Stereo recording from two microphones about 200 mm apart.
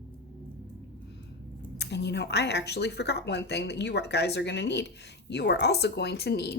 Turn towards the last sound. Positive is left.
turn(degrees=55)  # may be behind; listen again after turning